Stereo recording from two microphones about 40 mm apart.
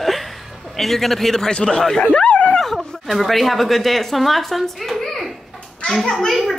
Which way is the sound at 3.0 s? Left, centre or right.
Centre.